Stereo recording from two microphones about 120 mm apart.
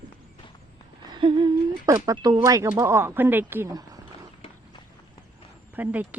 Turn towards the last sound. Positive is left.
turn(degrees=-10)  # may be behind; listen again after turning